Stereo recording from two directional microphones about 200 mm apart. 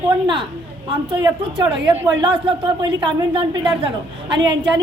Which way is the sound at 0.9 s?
25° right (ahead or behind).